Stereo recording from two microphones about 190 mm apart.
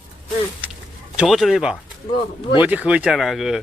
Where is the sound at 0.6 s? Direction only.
10° right (ahead or behind).